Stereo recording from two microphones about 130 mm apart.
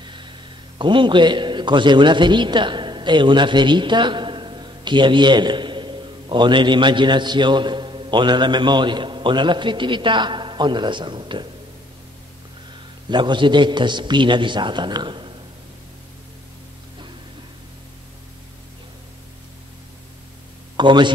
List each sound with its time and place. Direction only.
0.7 s a man's voice: 40° right (ahead or behind)
13.1 s a man's voice: 35° right (ahead or behind)
20.7 s speech: 35° right (ahead or behind)